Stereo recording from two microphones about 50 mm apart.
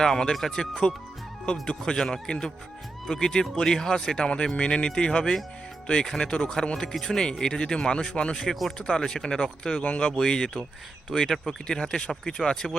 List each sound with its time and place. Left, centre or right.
0.0 s speech: centre
1.9 s speech: centre